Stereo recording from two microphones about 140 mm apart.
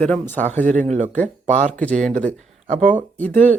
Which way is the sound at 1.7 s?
10° left (ahead or behind).